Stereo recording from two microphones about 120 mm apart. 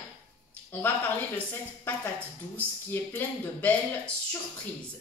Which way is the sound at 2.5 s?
15° left (ahead or behind).